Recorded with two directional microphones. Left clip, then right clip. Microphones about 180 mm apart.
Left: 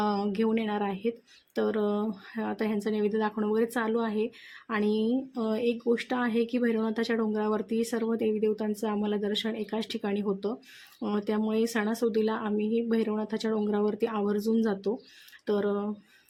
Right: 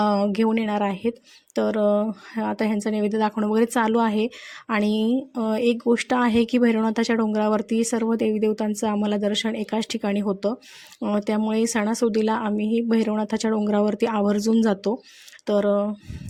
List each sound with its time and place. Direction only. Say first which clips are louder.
0.0 s speech: right 7 dB; 40° right (ahead or behind)